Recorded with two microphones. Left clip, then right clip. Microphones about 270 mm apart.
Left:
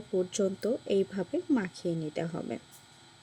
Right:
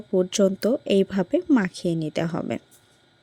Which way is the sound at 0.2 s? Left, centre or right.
Right.